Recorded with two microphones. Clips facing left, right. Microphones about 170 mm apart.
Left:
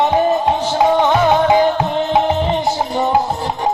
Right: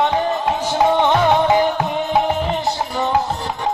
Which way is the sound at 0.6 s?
10° left (ahead or behind).